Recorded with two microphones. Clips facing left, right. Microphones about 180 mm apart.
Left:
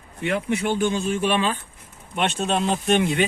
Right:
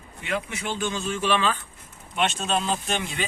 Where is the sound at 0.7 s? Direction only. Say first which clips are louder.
Left 3 dB; 55° left (ahead or behind).